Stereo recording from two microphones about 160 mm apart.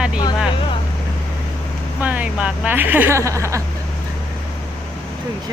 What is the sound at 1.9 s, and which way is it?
Speech, 10° right (ahead or behind).